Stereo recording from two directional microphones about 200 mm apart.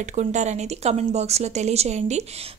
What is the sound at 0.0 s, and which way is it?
Speech, 35° right (ahead or behind).